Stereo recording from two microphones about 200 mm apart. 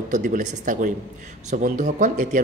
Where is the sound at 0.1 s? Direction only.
40° right (ahead or behind).